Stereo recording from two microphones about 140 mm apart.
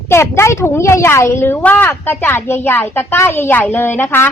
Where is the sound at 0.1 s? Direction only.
20° left (ahead or behind).